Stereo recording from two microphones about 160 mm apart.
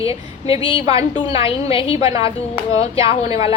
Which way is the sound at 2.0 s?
20° right (ahead or behind).